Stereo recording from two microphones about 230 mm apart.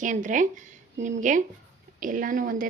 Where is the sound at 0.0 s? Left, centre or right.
Right.